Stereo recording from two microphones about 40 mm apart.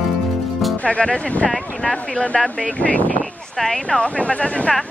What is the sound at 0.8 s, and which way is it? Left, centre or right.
Speech, left.